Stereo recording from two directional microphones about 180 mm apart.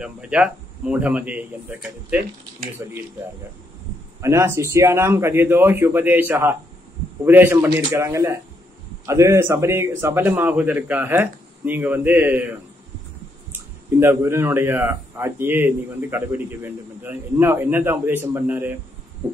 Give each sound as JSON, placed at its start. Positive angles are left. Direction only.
{"t": 0.0, "sound": "speech", "side_deg": -5}
{"t": 4.2, "sound": "speech", "side_deg": -15}
{"t": 13.5, "sound": "speech", "side_deg": -10}
{"t": 19.2, "sound": "a sound", "side_deg": -10}